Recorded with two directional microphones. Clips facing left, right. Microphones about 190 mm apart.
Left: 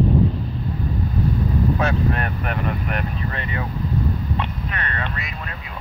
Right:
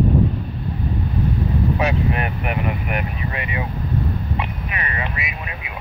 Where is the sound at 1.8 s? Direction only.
15° right (ahead or behind).